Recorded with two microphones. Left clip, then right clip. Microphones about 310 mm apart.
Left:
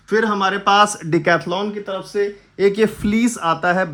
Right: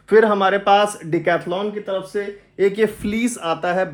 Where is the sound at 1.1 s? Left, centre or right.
Left.